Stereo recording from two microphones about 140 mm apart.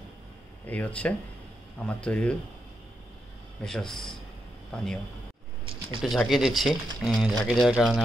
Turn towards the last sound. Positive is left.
turn(degrees=0)  # may be behind; listen again after turning